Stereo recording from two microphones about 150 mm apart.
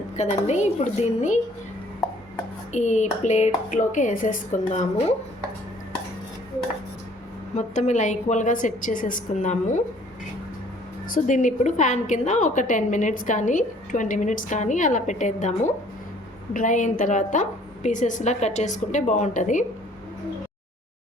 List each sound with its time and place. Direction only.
0.2 s speech: 50° left (ahead or behind)
2.7 s speech: 50° left (ahead or behind)
7.5 s a woman's voice: 50° left (ahead or behind)
11.1 s a woman's voice: 55° left (ahead or behind)